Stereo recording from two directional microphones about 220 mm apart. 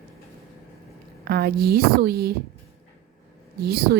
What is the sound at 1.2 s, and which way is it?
A woman's voice, 45° right (ahead or behind).